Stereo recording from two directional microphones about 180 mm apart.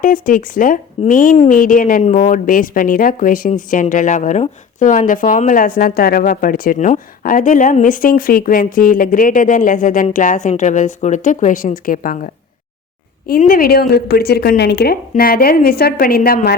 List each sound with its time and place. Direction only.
0.0 s speech: 50° left (ahead or behind)
13.4 s a woman's voice: 55° left (ahead or behind)
15.1 s a woman's voice: 55° left (ahead or behind)